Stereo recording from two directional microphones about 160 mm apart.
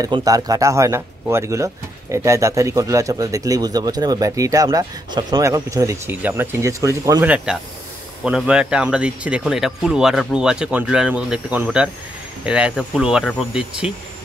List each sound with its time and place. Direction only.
0.0 s speech: 25° right (ahead or behind)
7.2 s speech: 5° right (ahead or behind)